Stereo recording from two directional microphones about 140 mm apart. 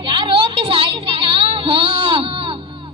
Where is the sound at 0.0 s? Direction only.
35° right (ahead or behind).